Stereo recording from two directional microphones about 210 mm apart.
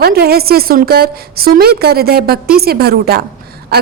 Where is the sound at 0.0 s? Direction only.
45° right (ahead or behind).